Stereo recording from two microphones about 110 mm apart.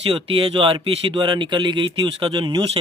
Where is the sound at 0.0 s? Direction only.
60° right (ahead or behind).